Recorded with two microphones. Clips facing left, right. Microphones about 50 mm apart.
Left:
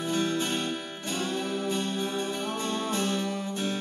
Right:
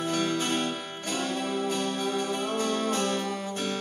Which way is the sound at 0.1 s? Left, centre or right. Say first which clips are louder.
Left 1 dB; right.